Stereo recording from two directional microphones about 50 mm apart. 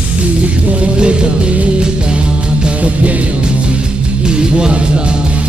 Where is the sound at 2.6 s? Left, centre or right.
Right.